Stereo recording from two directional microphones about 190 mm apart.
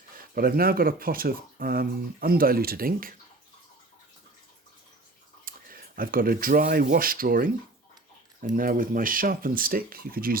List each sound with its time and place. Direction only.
0.2 s speech: 50° right (ahead or behind)
5.5 s speech: 50° right (ahead or behind)